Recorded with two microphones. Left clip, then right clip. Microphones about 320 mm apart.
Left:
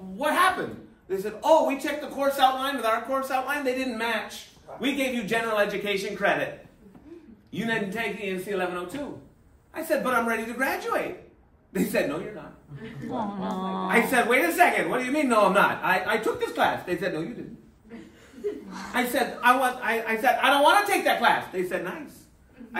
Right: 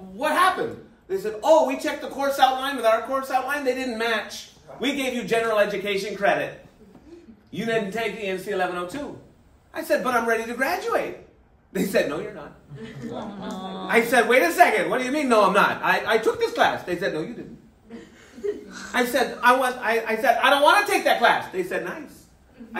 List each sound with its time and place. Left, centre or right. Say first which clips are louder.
0.2 s speech: right 2 dB; centre
7.5 s speech: right 3 dB; centre
13.1 s speech: left 4 dB; left
13.9 s speech: right 4 dB; centre
18.7 s chuckle: right 1 dB; left
18.9 s speech: right 3 dB; centre